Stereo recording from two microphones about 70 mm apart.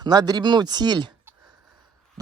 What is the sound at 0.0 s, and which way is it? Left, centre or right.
Speech, right.